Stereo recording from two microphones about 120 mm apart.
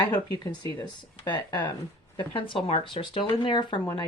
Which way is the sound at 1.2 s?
35° left (ahead or behind).